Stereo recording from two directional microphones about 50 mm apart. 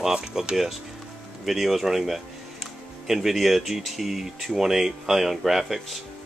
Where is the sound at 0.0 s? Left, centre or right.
Centre.